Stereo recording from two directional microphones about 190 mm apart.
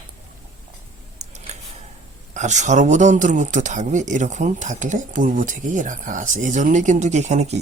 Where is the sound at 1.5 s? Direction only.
35° right (ahead or behind).